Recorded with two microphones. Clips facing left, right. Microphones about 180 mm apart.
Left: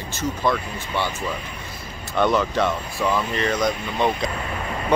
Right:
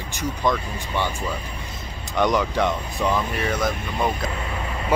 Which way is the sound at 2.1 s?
15° right (ahead or behind).